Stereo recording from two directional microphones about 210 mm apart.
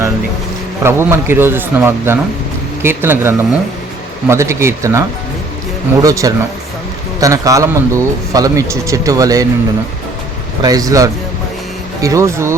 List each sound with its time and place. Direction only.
0.8 s a man's voice: 10° right (ahead or behind)
10.6 s a man's voice: 15° right (ahead or behind)